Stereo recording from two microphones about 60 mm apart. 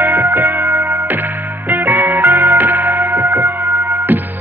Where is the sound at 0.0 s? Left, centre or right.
Right.